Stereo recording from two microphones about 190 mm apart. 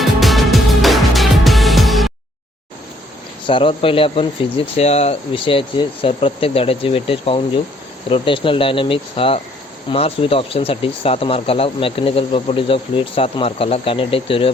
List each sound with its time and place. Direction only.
0.0 s music: centre (ahead or behind)
3.4 s speech: 25° left (ahead or behind)